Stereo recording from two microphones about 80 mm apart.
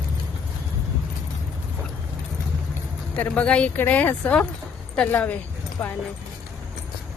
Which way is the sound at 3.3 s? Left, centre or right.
Centre.